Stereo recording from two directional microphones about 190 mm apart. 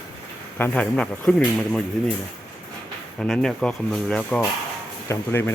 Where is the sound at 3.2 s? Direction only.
5° left (ahead or behind).